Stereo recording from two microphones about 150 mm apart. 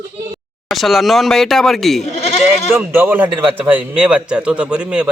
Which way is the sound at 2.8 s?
10° right (ahead or behind).